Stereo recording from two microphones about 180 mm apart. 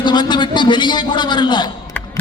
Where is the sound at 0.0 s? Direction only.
25° left (ahead or behind).